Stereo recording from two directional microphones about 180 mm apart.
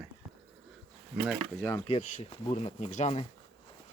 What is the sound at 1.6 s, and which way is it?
Speech, 15° left (ahead or behind).